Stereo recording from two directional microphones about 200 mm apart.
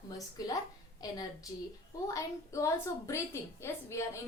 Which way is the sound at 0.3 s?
20° left (ahead or behind).